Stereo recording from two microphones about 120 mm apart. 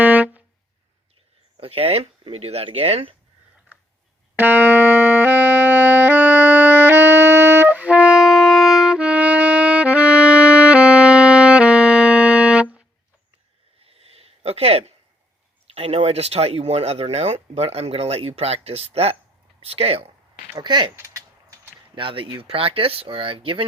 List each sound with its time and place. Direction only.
0.0 s music: 10° right (ahead or behind)
1.5 s speech: 55° right (ahead or behind)
4.4 s music: 15° right (ahead or behind)
13.8 s a sound: 55° right (ahead or behind)
15.7 s speech: 55° right (ahead or behind)
20.6 s speech: 40° right (ahead or behind)
21.9 s speech: 45° right (ahead or behind)